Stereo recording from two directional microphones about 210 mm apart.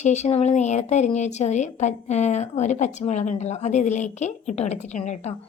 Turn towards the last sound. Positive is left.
turn(degrees=30)  # may be behind; listen again after turning